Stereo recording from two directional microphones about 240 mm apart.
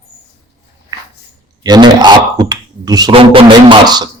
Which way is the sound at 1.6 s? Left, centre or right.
Centre.